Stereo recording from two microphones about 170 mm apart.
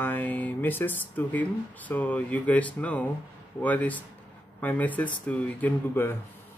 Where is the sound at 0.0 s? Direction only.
10° left (ahead or behind).